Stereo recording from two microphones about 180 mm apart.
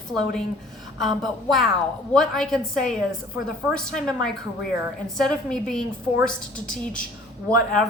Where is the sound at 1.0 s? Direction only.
Centre (ahead or behind).